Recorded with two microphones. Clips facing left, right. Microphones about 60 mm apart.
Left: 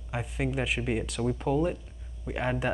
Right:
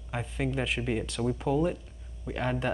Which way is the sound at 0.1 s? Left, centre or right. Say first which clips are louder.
Even; centre.